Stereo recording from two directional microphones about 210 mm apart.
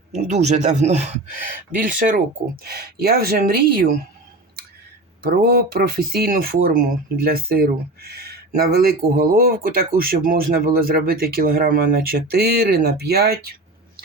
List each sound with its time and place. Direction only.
0.1 s speech: 30° right (ahead or behind)
5.2 s speech: 45° right (ahead or behind)